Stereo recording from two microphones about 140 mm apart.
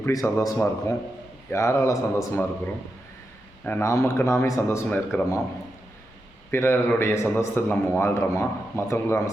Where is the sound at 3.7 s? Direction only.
20° left (ahead or behind).